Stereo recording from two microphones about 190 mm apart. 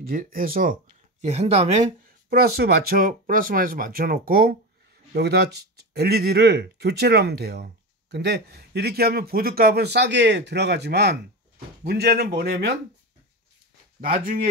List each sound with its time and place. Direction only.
0.0 s speech: 50° right (ahead or behind)
1.2 s speech: 35° right (ahead or behind)
2.2 s speech: 55° right (ahead or behind)
14.2 s speech: 50° right (ahead or behind)